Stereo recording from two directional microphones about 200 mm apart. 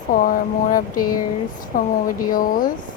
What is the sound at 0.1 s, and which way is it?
Speech, 45° left (ahead or behind).